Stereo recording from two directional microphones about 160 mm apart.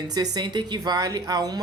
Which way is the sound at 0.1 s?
25° right (ahead or behind).